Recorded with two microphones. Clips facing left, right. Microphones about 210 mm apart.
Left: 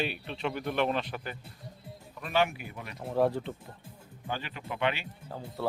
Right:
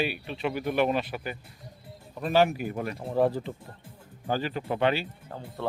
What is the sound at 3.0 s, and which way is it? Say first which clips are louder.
Speech: right 1 dB; centre (ahead or behind).